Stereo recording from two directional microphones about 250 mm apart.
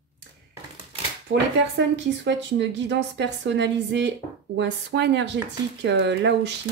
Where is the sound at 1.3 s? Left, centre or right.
Right.